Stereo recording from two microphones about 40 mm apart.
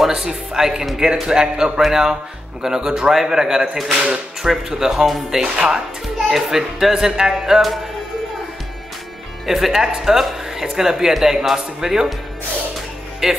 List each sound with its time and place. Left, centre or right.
0.1 s speech: centre
3.7 s speech: centre
4.0 s speech: centre
5.4 s speech: right
6.2 s speech: centre
9.5 s speech: centre
13.2 s speech: centre